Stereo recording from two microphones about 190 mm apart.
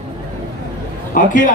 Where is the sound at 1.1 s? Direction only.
45° left (ahead or behind).